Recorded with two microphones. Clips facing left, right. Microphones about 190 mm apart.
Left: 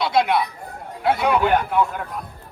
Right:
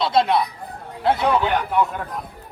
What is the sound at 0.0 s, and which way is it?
Speech, centre (ahead or behind).